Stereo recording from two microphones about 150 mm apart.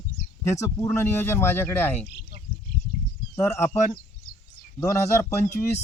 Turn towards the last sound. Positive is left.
turn(degrees=20)  # may be behind; listen again after turning